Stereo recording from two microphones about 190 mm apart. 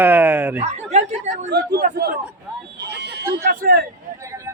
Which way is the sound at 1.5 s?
60° right (ahead or behind).